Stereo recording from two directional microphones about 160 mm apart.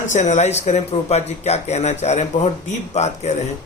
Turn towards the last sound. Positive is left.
turn(degrees=45)  # may be behind; listen again after turning